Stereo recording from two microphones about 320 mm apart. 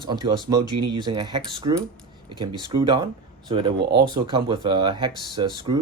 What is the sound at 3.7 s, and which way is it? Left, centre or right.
Speech, right.